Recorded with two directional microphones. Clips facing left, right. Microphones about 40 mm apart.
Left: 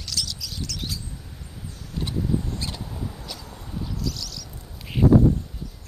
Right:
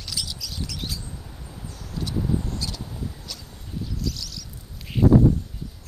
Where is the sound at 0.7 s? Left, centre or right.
Centre.